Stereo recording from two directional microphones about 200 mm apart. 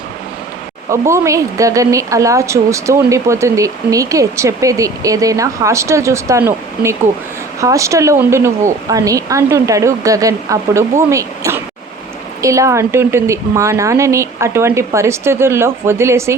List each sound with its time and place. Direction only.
0.9 s a woman's voice: 15° right (ahead or behind)